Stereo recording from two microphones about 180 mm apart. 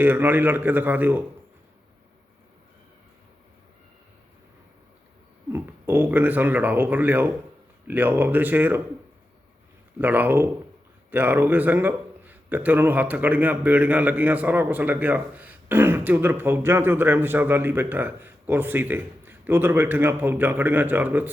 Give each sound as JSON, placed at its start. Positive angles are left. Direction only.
{"t": 0.0, "sound": "a man's voice", "side_deg": -10}
{"t": 5.5, "sound": "a man's voice", "side_deg": -10}
{"t": 10.0, "sound": "a man's voice", "side_deg": -10}